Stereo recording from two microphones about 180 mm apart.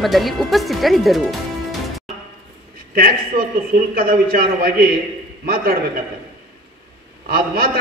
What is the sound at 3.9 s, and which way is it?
A man's voice, 50° right (ahead or behind).